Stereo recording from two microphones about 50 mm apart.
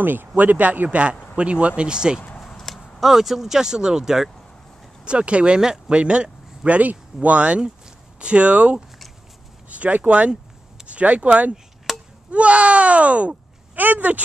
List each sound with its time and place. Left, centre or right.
0.0 s speech: right
0.8 s speech: right
2.4 s speech: centre
5.0 s speech: right
11.9 s chop: centre
12.3 s speech: right